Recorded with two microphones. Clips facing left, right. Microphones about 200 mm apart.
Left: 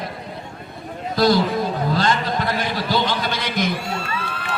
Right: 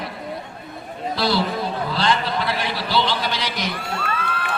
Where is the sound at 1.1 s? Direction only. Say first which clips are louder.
Left 5 dB; 45° left (ahead or behind).